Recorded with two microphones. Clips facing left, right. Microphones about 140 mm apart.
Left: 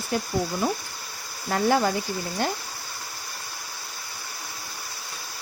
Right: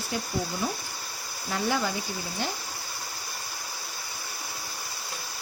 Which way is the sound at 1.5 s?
50° left (ahead or behind).